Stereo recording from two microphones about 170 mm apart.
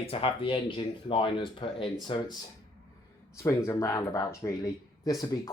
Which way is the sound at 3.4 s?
20° left (ahead or behind).